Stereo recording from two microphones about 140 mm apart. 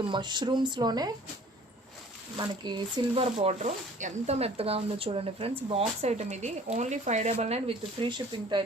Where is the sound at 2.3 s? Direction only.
30° right (ahead or behind).